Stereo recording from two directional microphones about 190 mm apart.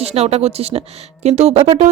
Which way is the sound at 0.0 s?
35° right (ahead or behind).